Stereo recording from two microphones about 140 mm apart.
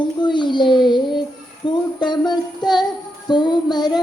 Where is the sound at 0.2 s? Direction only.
35° left (ahead or behind).